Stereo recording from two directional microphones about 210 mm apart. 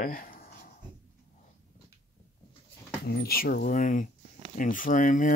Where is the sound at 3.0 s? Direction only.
50° left (ahead or behind).